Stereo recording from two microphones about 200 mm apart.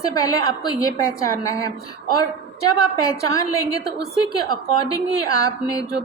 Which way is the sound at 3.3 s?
15° left (ahead or behind).